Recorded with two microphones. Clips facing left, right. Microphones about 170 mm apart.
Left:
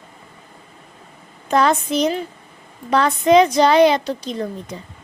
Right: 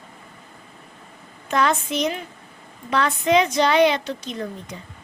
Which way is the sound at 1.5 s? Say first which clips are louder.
Left 4 dB; 35° left (ahead or behind).